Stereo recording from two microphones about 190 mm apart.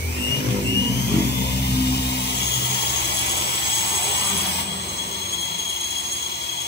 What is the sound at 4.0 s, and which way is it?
Jet engine, 60° left (ahead or behind).